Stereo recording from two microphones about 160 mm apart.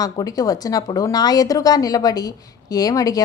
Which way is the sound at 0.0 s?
25° left (ahead or behind).